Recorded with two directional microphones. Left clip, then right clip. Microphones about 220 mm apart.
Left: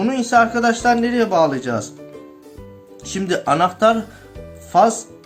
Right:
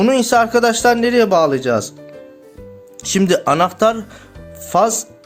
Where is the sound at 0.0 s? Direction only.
50° right (ahead or behind).